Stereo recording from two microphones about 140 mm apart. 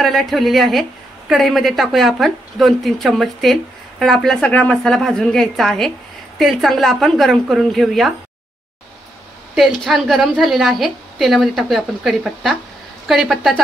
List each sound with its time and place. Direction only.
0.0 s a woman's voice: centre (ahead or behind)
9.6 s a woman's voice: centre (ahead or behind)